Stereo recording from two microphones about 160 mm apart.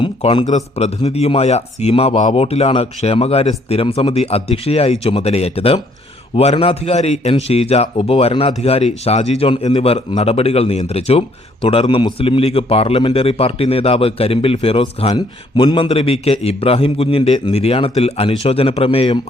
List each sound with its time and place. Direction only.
0.0 s a man's voice: 35° left (ahead or behind)